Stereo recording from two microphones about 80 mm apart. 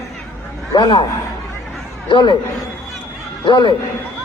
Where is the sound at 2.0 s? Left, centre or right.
Left.